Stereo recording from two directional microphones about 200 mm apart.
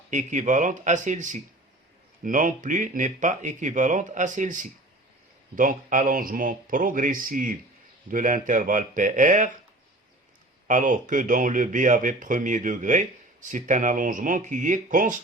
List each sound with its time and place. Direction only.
0.1 s speech: 40° right (ahead or behind)
10.7 s speech: 40° right (ahead or behind)